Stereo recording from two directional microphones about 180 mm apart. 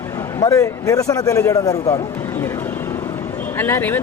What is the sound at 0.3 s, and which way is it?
A man's voice, 20° left (ahead or behind).